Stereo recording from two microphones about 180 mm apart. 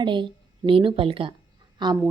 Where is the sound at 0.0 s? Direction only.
25° right (ahead or behind).